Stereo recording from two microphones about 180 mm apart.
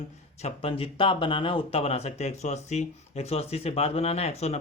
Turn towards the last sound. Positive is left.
turn(degrees=35)  # may be behind; listen again after turning